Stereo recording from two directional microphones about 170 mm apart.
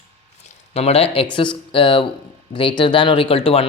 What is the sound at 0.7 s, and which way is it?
Speech, 40° left (ahead or behind).